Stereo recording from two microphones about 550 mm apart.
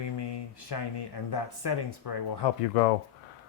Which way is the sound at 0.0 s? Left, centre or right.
Left.